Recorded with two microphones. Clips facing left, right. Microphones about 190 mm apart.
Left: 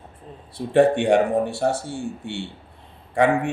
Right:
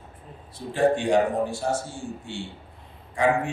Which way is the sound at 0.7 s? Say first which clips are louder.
Left 4 dB; 65° left (ahead or behind).